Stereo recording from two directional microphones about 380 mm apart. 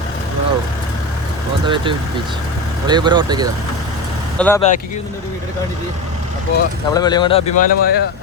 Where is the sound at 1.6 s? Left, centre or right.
Centre.